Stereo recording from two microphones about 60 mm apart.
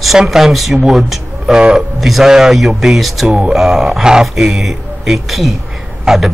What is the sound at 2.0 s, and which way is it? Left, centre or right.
Speech, centre.